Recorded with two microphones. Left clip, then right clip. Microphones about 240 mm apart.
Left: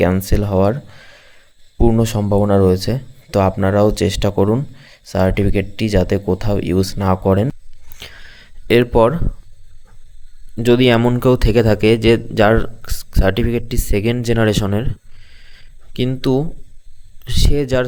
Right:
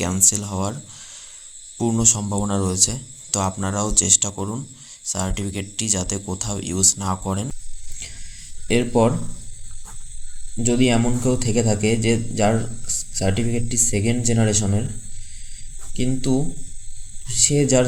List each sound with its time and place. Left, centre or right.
0.0 s speech: left
7.9 s a sound: left
10.6 s speech: left
15.9 s speech: left